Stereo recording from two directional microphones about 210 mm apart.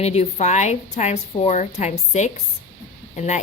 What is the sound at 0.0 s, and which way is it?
A woman's voice, 30° left (ahead or behind).